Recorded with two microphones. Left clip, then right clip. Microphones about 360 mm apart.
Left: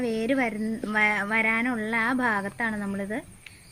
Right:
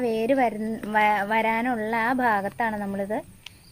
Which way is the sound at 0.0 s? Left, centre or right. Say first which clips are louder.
Right 4 dB; right.